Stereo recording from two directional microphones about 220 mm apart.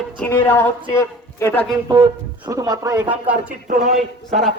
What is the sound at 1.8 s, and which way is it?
Speech, 15° right (ahead or behind).